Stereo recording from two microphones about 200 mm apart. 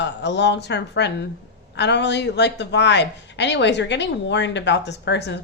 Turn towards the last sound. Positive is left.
turn(degrees=60)  # may be behind; listen again after turning